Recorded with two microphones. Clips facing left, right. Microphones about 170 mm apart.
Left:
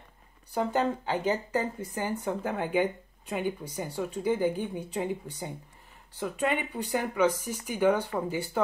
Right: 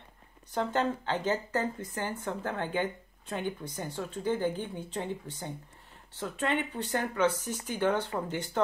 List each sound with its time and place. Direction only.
0.5 s speech: 10° left (ahead or behind)